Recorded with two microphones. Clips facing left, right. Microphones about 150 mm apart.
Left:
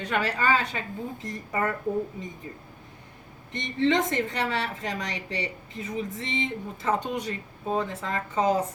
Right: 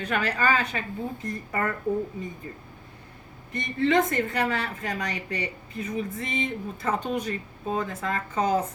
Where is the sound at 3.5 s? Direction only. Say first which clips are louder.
Right 1 dB; 25° left (ahead or behind).